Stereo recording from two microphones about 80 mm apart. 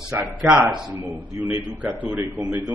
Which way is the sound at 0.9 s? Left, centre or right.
Right.